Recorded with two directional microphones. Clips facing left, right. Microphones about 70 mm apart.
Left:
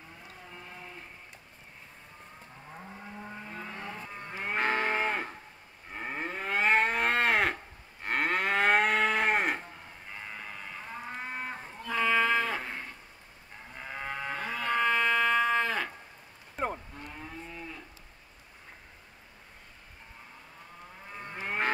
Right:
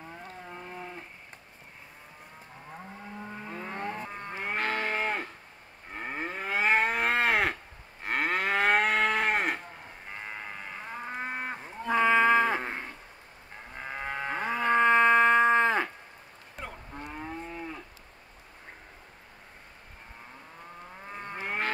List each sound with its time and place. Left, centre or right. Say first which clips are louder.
3.4 s vehicle: right 7 dB; right
4.6 s livestock: left 2 dB; left
5.9 s moo: right 1 dB; centre
10.3 s livestock: right 2 dB; centre
13.7 s livestock: right 2 dB; centre
17.1 s moo: right 6 dB; right
21.1 s moo: right 2 dB; right